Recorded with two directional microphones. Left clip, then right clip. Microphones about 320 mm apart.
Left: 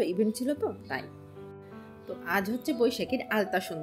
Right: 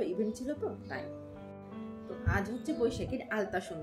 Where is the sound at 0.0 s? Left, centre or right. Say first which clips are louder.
Left 6 dB; left.